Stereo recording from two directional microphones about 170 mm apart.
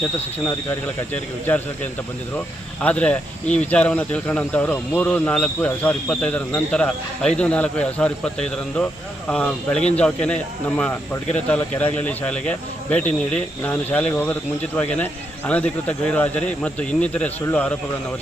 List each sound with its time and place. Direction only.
0.4 s speech: 10° left (ahead or behind)
2.8 s speech: 10° left (ahead or behind)